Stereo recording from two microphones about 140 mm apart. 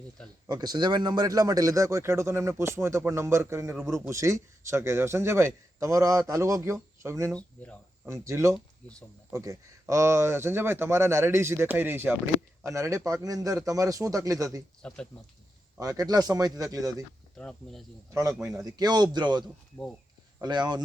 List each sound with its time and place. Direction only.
0.4 s speech: 30° right (ahead or behind)
7.3 s speech: 10° left (ahead or behind)
8.0 s speech: 20° right (ahead or behind)
14.8 s speech: 5° left (ahead or behind)
15.8 s speech: 25° right (ahead or behind)
17.3 s speech: 5° left (ahead or behind)
18.1 s speech: 20° right (ahead or behind)